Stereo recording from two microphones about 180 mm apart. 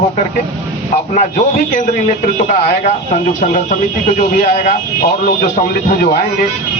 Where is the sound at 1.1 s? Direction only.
40° left (ahead or behind).